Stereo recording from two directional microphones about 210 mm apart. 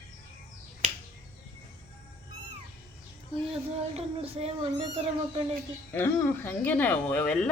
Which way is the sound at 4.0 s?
30° right (ahead or behind).